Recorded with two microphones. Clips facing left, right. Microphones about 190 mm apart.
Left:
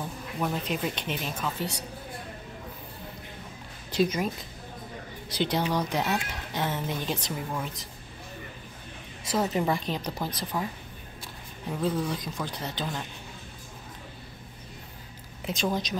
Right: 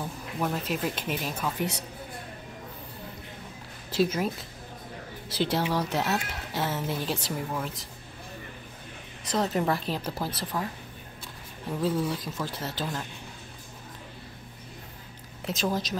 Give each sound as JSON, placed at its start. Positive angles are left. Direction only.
{"t": 0.4, "sound": "speech", "side_deg": 0}
{"t": 1.6, "sound": "a woman's voice", "side_deg": -20}
{"t": 3.9, "sound": "speech", "side_deg": -5}
{"t": 5.4, "sound": "speech", "side_deg": -5}
{"t": 9.3, "sound": "speech", "side_deg": 5}
{"t": 11.7, "sound": "speech", "side_deg": 0}
{"t": 15.4, "sound": "speech", "side_deg": 0}